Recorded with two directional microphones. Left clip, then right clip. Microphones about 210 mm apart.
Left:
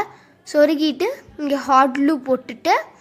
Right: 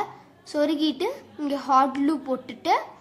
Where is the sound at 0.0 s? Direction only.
20° left (ahead or behind).